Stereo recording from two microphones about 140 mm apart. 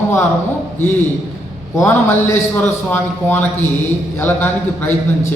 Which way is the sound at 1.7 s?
15° left (ahead or behind).